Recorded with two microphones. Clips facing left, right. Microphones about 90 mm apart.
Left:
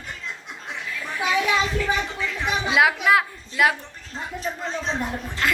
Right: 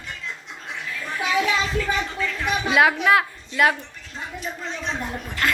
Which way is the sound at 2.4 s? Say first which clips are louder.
Right 1 dB; 5° left (ahead or behind).